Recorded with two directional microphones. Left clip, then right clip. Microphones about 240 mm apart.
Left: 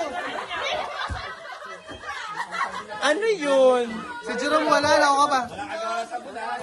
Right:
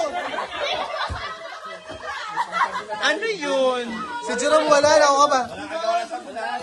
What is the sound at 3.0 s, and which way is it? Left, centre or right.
Speech, left.